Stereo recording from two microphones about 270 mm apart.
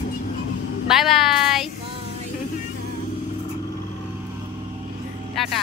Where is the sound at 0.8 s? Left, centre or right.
Centre.